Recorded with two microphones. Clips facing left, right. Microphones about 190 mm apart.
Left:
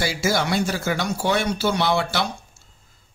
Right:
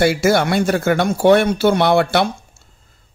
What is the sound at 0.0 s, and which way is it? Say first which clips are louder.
Speech: right 8 dB; 60° right (ahead or behind).